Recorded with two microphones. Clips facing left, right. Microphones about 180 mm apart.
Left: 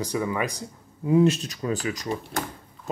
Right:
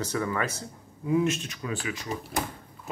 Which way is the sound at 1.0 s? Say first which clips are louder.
Left 5 dB; 30° left (ahead or behind).